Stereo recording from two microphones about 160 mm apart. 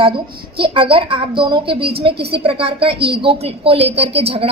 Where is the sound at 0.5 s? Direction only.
35° right (ahead or behind).